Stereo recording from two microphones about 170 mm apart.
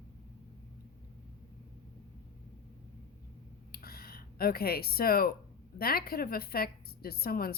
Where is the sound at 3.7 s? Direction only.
60° left (ahead or behind).